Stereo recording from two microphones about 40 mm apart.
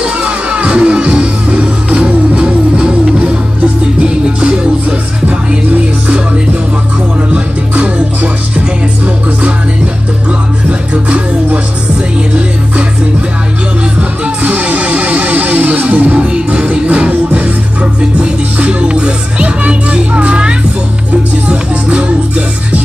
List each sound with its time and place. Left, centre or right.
0.0 s music: right
8.5 s music: right
11.1 s music: right
14.2 s music: right
16.3 s music: right